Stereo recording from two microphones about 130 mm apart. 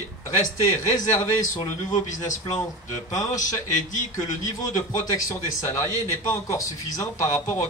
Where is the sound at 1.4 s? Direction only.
75° left (ahead or behind).